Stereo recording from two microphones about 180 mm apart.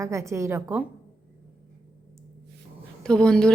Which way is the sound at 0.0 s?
15° right (ahead or behind).